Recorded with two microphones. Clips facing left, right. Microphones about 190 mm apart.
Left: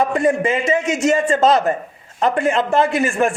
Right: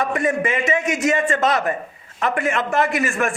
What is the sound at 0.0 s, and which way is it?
A man's voice, 30° left (ahead or behind).